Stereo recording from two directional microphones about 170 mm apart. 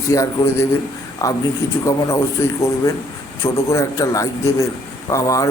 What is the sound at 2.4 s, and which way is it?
A man's voice, 15° left (ahead or behind).